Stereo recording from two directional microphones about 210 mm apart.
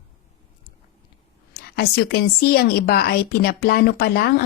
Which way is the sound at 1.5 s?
50° left (ahead or behind).